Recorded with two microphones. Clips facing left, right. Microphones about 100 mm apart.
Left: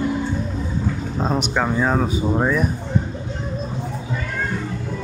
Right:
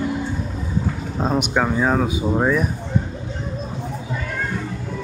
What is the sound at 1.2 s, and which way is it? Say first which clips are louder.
Speech: right 1 dB; 5° right (ahead or behind).